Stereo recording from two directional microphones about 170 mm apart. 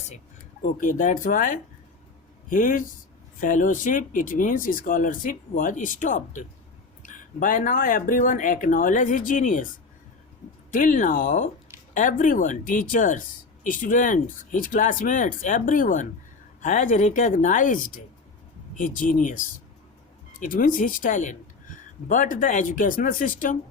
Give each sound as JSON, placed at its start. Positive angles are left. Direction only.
{"t": 0.6, "sound": "speech", "side_deg": 50}
{"t": 10.7, "sound": "speech", "side_deg": 50}
{"t": 20.4, "sound": "speech", "side_deg": 55}